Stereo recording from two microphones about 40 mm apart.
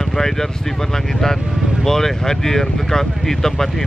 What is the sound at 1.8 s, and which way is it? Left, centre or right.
Speech, centre.